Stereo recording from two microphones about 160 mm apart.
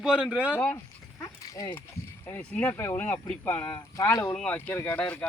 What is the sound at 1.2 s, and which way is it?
Horse, 20° left (ahead or behind).